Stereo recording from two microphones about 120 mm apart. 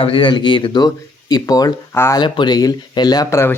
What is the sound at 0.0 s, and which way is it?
Speech, 45° left (ahead or behind).